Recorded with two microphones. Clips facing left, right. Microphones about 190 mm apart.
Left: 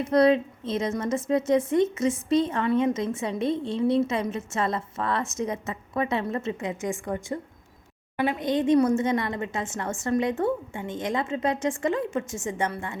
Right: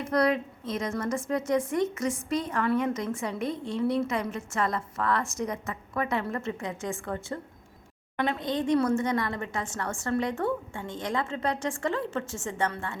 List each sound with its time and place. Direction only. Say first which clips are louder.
0.0 s speech: left 5 dB; 25° left (ahead or behind)